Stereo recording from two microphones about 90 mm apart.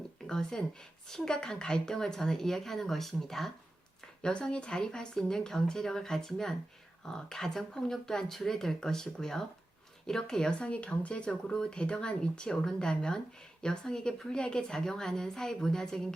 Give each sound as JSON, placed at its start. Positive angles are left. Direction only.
{"t": 0.3, "sound": "speech", "side_deg": 5}